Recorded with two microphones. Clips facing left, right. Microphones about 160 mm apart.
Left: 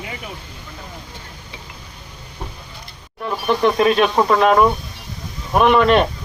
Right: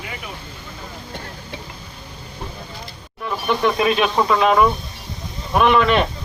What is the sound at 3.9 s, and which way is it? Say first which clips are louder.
Speech: left 2 dB; centre (ahead or behind).